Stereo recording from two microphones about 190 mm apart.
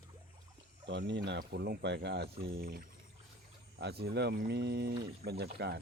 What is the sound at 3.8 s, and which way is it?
Speech, 55° right (ahead or behind).